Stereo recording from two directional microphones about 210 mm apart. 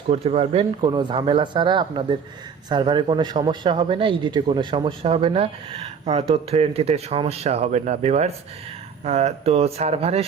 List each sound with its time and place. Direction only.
0.1 s speech: 30° right (ahead or behind)